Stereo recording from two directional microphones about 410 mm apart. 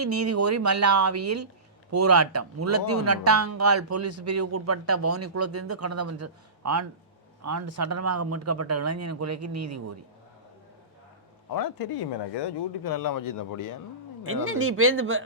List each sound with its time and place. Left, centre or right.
0.1 s speech: right
11.5 s speech: left
14.3 s speech: right